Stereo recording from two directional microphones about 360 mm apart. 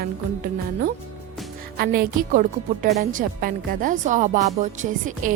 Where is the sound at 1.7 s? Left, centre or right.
Right.